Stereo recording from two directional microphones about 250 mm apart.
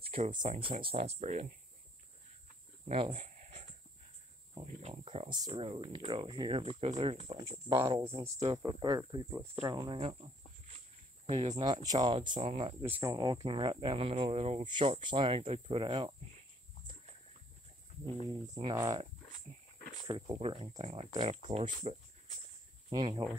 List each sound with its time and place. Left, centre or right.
0.0 s speech: right
2.9 s a sound: right
4.6 s speech: right
11.2 s speech: right
12.8 s speech: centre
18.3 s speech: centre
20.1 s speech: right